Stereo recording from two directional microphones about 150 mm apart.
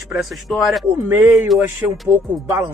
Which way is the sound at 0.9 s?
15° right (ahead or behind).